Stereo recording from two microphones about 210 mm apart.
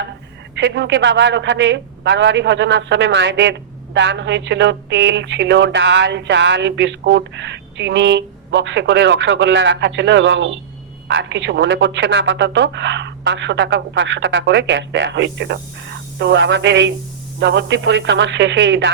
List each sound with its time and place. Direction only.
0.5 s a woman's voice: 55° right (ahead or behind)